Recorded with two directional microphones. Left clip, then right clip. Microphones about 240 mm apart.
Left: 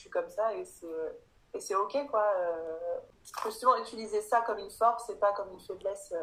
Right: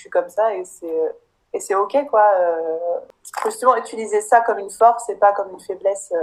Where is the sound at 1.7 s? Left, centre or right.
Right.